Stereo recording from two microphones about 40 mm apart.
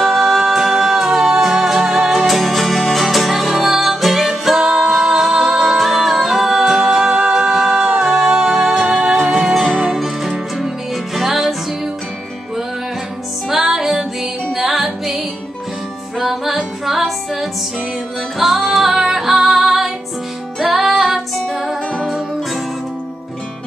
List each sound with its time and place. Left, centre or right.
0.0 s music: centre
4.6 s music: right
5.7 s music: centre
9.9 s music: centre
13.5 s music: centre
18.7 s music: centre